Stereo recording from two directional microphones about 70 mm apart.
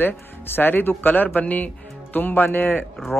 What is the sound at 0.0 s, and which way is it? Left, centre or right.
Speech, left.